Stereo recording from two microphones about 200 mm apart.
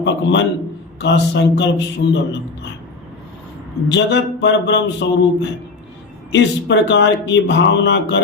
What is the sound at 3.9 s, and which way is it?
Speech, 60° left (ahead or behind).